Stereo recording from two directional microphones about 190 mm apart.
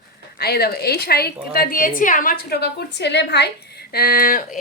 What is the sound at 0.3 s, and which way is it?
A woman's voice, 55° left (ahead or behind).